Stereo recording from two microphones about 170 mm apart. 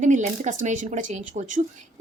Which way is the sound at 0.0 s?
45° right (ahead or behind).